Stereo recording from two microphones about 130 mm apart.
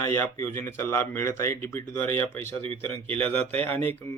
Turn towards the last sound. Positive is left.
turn(degrees=15)  # may be behind; listen again after turning